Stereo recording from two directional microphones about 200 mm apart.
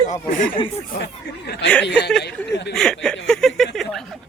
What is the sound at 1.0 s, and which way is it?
Speech, 55° left (ahead or behind).